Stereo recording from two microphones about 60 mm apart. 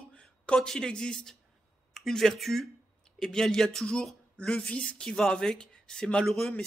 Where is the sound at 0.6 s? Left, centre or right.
Centre.